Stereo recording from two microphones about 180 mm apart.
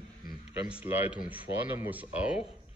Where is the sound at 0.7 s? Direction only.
10° right (ahead or behind).